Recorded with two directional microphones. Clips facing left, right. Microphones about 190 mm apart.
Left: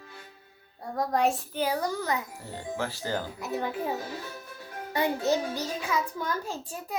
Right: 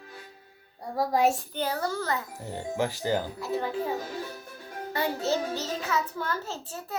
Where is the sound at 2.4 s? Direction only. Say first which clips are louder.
Right 4 dB; 15° right (ahead or behind).